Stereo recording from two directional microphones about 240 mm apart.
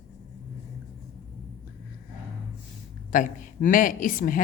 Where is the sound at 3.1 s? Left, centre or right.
Left.